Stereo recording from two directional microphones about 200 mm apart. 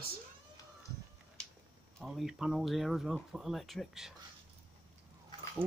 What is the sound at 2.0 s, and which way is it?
Speech, centre (ahead or behind).